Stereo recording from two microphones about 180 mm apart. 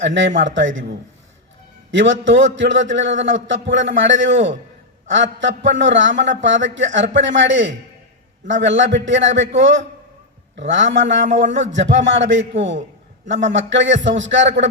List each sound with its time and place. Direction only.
0.0 s a man's voice: 90° right